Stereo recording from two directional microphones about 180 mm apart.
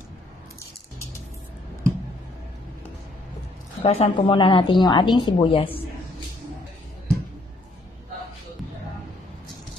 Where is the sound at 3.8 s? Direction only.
35° left (ahead or behind).